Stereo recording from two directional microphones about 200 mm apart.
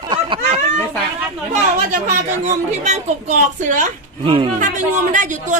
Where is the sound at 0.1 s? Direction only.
25° right (ahead or behind).